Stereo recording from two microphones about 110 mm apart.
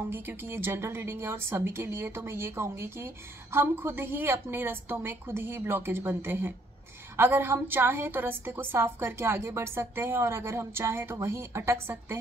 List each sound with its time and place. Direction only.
0.1 s a woman's voice: 20° right (ahead or behind)